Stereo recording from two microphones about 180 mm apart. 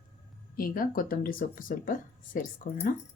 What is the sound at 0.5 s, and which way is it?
Speech, 55° left (ahead or behind).